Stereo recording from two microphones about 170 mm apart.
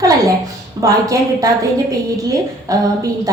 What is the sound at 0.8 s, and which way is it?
A woman's voice, 20° right (ahead or behind).